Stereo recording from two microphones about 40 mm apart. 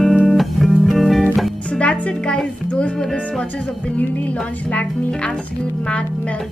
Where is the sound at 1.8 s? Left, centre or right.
Left.